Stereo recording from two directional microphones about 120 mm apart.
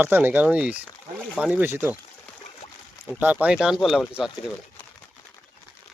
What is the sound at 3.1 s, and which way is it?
Speech, 10° right (ahead or behind).